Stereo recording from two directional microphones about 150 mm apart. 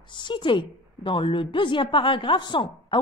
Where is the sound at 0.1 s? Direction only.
30° left (ahead or behind).